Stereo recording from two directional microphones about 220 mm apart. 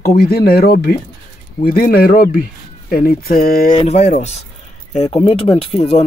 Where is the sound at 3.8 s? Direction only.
30° left (ahead or behind).